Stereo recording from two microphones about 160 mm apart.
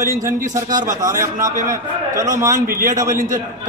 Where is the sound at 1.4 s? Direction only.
55° right (ahead or behind).